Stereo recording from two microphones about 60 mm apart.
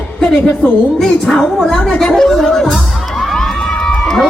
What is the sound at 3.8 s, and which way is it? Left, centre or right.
Crowd, centre.